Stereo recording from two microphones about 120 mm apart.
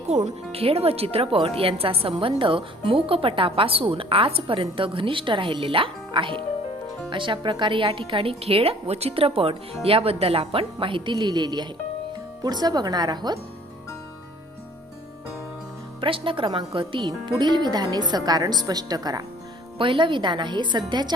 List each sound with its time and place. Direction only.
0.3 s speech: 55° right (ahead or behind); by 13.4 s 35° right (ahead or behind)
16.0 s speech: 45° right (ahead or behind)
19.8 s speech: 45° right (ahead or behind)